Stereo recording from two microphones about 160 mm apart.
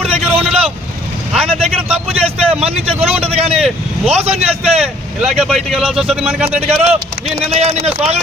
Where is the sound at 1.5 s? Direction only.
40° right (ahead or behind).